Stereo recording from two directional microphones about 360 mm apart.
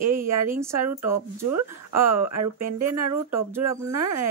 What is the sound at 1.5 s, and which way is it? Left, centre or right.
Speech, right.